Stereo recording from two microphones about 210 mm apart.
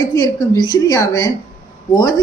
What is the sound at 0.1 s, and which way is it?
Speech, 15° left (ahead or behind).